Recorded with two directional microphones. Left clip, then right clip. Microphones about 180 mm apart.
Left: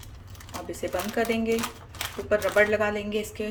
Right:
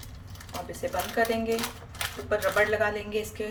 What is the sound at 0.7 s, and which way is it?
Speech, 30° left (ahead or behind).